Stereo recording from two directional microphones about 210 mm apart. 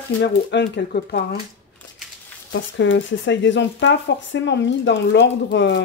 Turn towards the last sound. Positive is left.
turn(degrees=55)  # may be behind; listen again after turning